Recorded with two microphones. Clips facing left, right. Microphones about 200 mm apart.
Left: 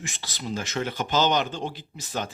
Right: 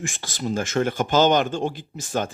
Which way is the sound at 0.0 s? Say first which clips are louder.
Right 7 dB; 50° right (ahead or behind).